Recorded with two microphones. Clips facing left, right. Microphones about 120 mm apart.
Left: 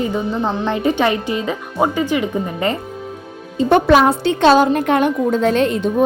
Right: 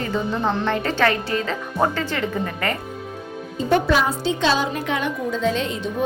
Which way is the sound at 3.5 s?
70° left (ahead or behind).